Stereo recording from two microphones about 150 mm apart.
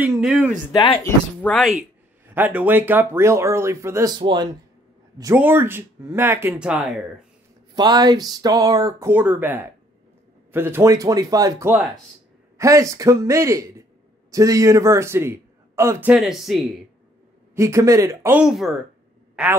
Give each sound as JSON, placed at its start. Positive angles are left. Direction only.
{"t": 0.2, "sound": "speech", "side_deg": -5}
{"t": 1.0, "sound": "speech", "side_deg": 10}
{"t": 1.6, "sound": "speech", "side_deg": -5}
{"t": 4.1, "sound": "speech", "side_deg": -30}
{"t": 5.3, "sound": "speech", "side_deg": -15}
{"t": 6.6, "sound": "speech", "side_deg": -5}
{"t": 7.7, "sound": "a man's voice", "side_deg": -25}
{"t": 16.1, "sound": "speech", "side_deg": 0}
{"t": 17.6, "sound": "speech", "side_deg": -20}
{"t": 18.4, "sound": "speech", "side_deg": 0}